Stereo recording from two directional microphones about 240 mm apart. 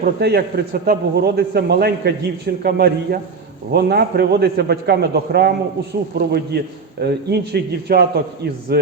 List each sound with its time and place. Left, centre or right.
0.2 s a man's voice: right